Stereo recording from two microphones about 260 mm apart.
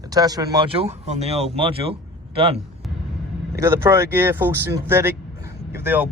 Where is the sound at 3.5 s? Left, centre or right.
Centre.